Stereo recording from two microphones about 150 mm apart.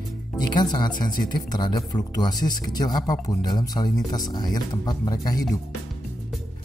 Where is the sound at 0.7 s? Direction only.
30° left (ahead or behind).